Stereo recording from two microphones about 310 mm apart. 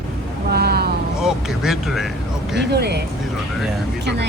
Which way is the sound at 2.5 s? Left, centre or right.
Right.